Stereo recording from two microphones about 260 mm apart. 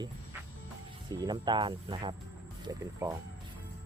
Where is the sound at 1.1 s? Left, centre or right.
Centre.